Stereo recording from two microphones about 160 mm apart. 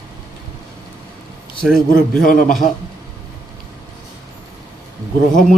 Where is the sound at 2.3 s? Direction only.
60° left (ahead or behind).